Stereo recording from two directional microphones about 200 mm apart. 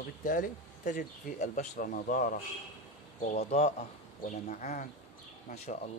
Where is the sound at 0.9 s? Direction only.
40° left (ahead or behind).